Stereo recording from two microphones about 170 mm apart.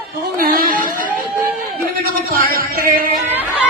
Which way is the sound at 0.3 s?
60° right (ahead or behind).